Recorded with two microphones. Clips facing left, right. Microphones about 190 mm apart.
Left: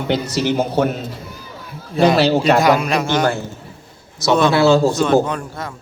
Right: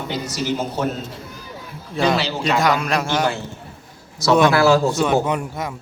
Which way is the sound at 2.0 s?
60° left (ahead or behind).